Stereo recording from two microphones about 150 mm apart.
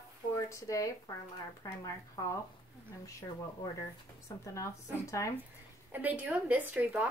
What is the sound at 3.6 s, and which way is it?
A woman's voice, 20° left (ahead or behind).